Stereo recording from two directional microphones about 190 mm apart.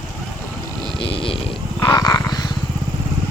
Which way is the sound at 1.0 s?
30° left (ahead or behind).